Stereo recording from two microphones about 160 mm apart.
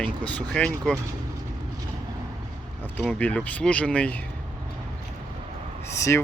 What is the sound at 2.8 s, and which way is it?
Speech, 10° left (ahead or behind).